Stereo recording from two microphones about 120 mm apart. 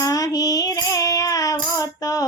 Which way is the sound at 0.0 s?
30° left (ahead or behind).